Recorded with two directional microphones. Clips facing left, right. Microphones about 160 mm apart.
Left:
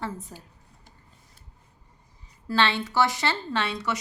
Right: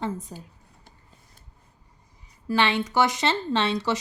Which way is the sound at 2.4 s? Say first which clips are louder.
Right 1 dB; 15° right (ahead or behind).